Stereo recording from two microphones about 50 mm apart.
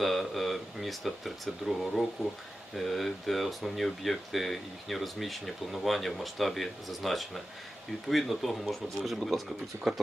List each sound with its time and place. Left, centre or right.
0.0 s speech: centre
9.7 s speech: right